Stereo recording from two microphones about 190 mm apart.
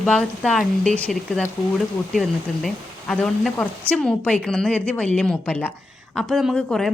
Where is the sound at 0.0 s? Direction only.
5° left (ahead or behind).